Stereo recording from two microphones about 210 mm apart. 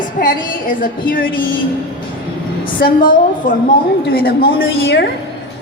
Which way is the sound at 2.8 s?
40° left (ahead or behind).